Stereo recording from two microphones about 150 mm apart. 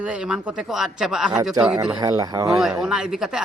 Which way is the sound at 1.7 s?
25° right (ahead or behind).